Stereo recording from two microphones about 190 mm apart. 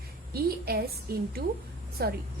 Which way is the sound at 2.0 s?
55° right (ahead or behind).